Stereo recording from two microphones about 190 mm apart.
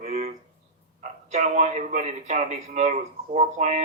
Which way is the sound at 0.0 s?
35° right (ahead or behind).